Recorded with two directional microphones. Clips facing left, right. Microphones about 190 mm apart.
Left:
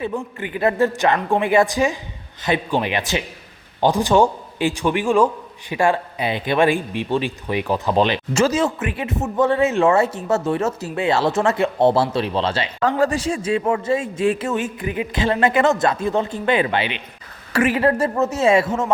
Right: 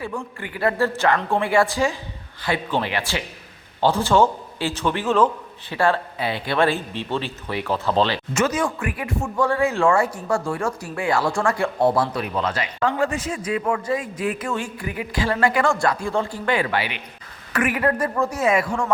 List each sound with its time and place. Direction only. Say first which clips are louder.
0.0 s a man's voice: left 4 dB; 20° left (ahead or behind)
8.3 s speech: left 4 dB; 30° left (ahead or behind)